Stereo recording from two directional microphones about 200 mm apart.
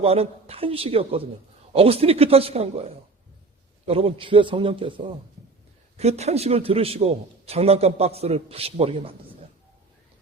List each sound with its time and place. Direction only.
0.0 s a man's voice: 30° right (ahead or behind)